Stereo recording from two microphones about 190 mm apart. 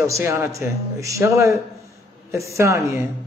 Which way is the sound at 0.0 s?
15° right (ahead or behind).